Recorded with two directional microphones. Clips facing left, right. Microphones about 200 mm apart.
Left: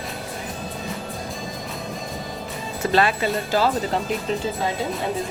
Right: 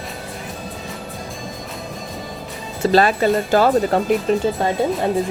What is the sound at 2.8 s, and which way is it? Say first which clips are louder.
Speech: right 6 dB; 40° right (ahead or behind).